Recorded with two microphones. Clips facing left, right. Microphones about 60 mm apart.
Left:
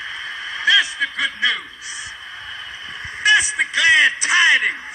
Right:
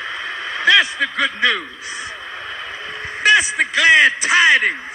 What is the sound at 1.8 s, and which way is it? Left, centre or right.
Speech, right.